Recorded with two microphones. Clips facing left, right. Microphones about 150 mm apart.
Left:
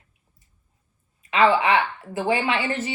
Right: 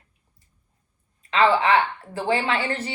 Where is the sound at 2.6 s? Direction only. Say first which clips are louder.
Left 1 dB; 35° right (ahead or behind).